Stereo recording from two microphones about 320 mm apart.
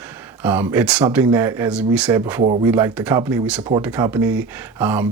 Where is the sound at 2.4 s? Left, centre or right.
Centre.